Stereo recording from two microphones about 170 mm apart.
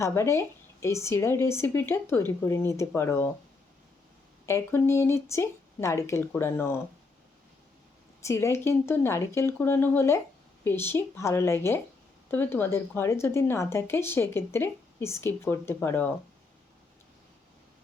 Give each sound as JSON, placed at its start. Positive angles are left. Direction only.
{"t": 0.0, "sound": "speech", "side_deg": 15}
{"t": 4.4, "sound": "speech", "side_deg": 15}
{"t": 8.2, "sound": "speech", "side_deg": 15}